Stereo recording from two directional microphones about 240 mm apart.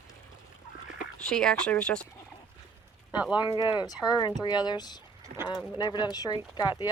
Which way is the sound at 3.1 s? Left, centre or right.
Centre.